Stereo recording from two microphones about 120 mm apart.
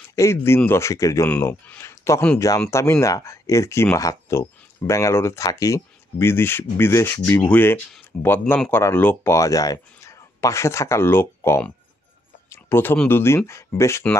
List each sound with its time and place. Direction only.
0.1 s speech: 25° left (ahead or behind)
12.4 s a sound: 20° left (ahead or behind)
13.1 s speech: 20° left (ahead or behind)